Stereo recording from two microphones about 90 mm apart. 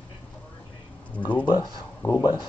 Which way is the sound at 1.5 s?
50° left (ahead or behind).